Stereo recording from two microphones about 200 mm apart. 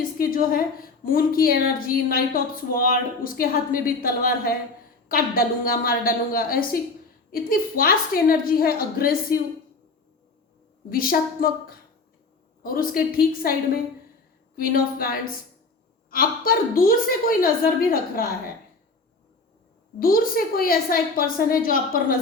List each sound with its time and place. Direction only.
0.2 s speech: 45° left (ahead or behind)
10.8 s speech: 45° left (ahead or behind)
20.0 s speech: 45° left (ahead or behind)